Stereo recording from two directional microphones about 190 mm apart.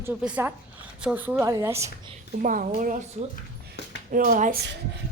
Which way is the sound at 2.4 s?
45° right (ahead or behind).